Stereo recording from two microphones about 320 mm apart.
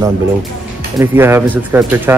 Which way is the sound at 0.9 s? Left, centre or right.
Centre.